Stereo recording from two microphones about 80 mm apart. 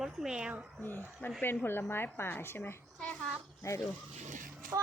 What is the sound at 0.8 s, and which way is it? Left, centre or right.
Speech, left.